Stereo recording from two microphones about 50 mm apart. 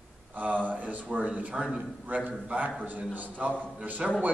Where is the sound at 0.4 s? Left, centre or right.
Right.